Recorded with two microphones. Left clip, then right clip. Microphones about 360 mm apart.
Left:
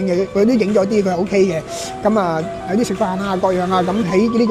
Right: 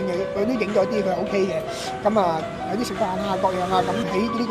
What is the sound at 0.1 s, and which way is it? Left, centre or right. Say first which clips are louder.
Speech: left 11 dB; left.